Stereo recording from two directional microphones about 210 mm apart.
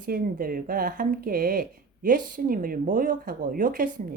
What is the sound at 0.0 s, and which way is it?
Speech, 45° right (ahead or behind).